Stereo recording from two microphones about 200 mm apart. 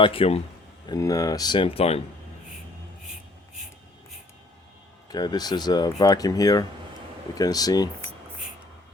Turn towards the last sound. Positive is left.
turn(degrees=20)  # may be behind; listen again after turning